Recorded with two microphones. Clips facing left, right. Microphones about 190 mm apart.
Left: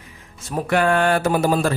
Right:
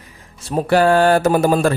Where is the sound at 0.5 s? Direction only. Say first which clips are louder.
Right 5 dB; 35° right (ahead or behind); by 1.7 s 50° right (ahead or behind).